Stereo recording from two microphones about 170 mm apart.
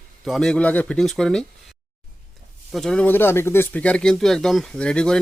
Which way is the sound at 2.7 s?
Centre (ahead or behind).